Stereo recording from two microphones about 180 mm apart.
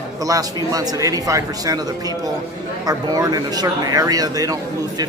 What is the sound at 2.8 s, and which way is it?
Speech, 20° right (ahead or behind).